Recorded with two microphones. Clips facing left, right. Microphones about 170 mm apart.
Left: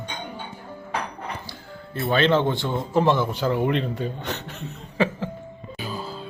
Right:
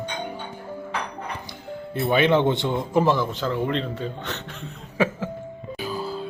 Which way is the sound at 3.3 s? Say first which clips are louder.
Left 2 dB; 15° left (ahead or behind).